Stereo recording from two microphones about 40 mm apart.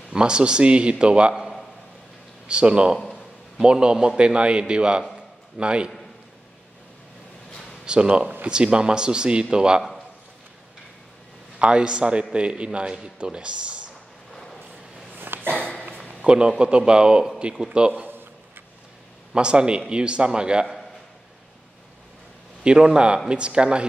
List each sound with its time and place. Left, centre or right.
0.1 s a man's voice: right
2.4 s a man's voice: right
7.8 s a man's voice: right
11.6 s a man's voice: right
14.3 s vehicle: centre
15.1 s a sound: right
15.5 s a sound: left
16.0 s a man's voice: right
19.3 s a man's voice: right
22.6 s a man's voice: right